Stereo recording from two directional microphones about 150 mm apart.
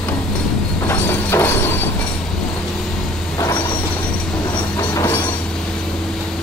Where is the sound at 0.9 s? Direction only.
15° left (ahead or behind).